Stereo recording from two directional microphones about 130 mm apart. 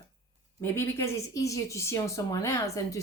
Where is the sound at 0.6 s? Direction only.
20° left (ahead or behind).